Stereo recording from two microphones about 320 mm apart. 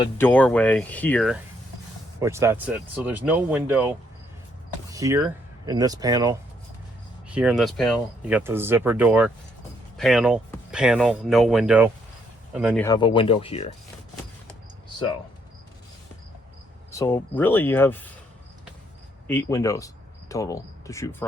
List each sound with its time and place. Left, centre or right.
0.0 s speech: centre
2.2 s speech: centre
12.8 s speech: centre
16.9 s speech: centre
19.3 s speech: centre